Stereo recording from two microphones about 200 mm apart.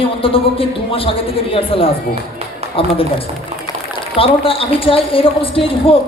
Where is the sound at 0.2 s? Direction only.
25° left (ahead or behind).